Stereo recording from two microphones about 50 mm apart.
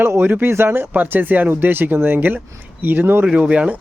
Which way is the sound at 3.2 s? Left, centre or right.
Centre.